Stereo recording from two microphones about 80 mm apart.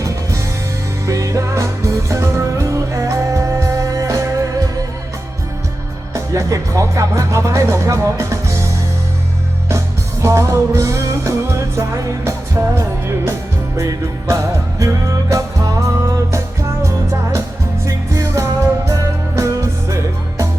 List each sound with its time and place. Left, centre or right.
1.0 s music: right
6.1 s speech: right
9.6 s music: right